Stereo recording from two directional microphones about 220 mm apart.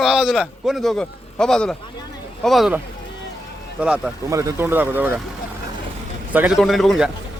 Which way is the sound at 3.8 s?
5° right (ahead or behind).